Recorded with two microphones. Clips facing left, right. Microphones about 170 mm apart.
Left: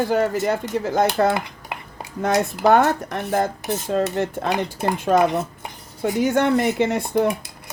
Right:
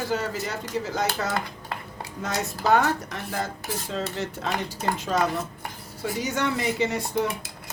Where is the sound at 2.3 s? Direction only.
60° left (ahead or behind).